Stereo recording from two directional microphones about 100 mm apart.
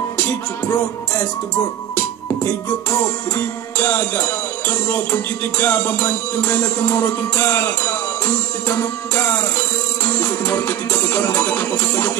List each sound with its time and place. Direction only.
0.2 s music: 20° left (ahead or behind)